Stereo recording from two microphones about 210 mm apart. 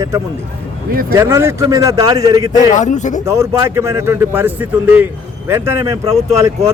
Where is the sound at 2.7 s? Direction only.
35° left (ahead or behind).